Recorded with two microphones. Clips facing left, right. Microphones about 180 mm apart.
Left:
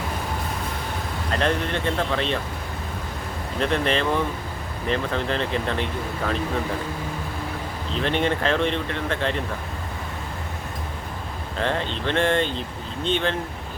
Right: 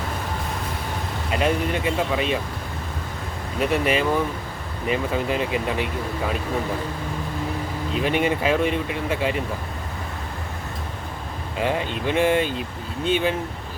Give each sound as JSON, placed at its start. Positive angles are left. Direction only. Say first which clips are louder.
{"t": 1.3, "sound": "speech", "louder": "right 2 dB", "side_deg": -10}
{"t": 3.6, "sound": "speech", "louder": "right 2 dB", "side_deg": -10}
{"t": 7.9, "sound": "speech", "louder": "right 1 dB", "side_deg": -10}
{"t": 11.5, "sound": "speech", "louder": "right 1 dB", "side_deg": -10}